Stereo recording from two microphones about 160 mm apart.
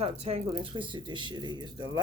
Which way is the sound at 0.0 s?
40° right (ahead or behind).